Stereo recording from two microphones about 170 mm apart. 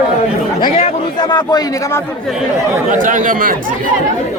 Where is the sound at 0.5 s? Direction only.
25° left (ahead or behind).